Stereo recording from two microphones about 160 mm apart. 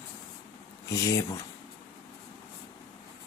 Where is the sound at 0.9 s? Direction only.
20° left (ahead or behind).